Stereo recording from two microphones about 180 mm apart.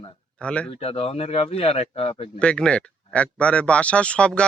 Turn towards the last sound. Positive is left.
turn(degrees=5)  # may be behind; listen again after turning